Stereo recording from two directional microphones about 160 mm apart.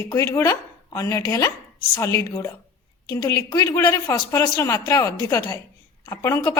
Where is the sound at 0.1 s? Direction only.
20° left (ahead or behind).